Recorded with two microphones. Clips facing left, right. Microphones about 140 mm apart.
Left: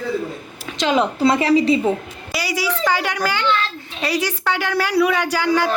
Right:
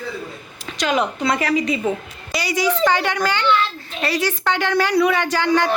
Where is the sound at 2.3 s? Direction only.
5° left (ahead or behind).